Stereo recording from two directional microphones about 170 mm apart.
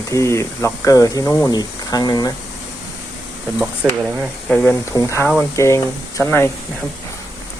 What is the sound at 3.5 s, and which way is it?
Speech, 10° right (ahead or behind).